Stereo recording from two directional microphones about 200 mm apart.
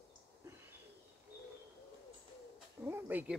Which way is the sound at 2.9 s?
10° right (ahead or behind).